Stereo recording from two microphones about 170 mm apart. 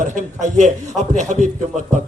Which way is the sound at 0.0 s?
45° right (ahead or behind).